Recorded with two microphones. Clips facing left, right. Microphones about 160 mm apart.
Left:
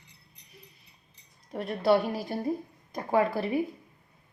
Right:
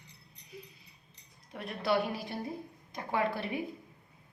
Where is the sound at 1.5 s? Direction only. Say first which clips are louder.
Left 8 dB; 40° left (ahead or behind).